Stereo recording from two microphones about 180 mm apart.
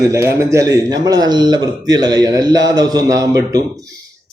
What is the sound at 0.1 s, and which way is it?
Speech, 15° right (ahead or behind).